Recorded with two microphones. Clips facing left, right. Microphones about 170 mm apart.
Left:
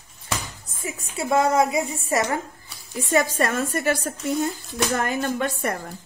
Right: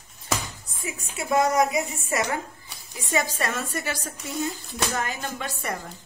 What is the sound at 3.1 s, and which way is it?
A woman's voice, 50° left (ahead or behind).